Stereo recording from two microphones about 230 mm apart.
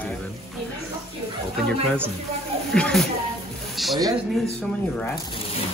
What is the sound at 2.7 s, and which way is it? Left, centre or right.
Speech, centre.